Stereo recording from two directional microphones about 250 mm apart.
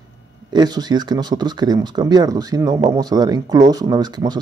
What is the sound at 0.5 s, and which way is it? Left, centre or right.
Speech, centre.